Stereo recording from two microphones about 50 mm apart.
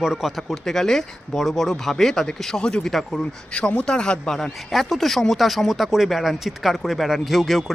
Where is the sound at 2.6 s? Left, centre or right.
Centre.